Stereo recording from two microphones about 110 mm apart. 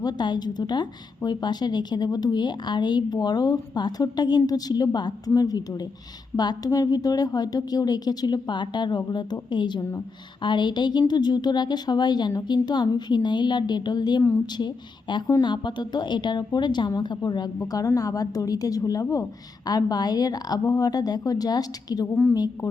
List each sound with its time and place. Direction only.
0.0 s a woman's voice: 40° left (ahead or behind)
14.2 s a woman's voice: 20° left (ahead or behind)
15.3 s a woman's voice: 40° left (ahead or behind)
22.1 s a woman's voice: 15° left (ahead or behind)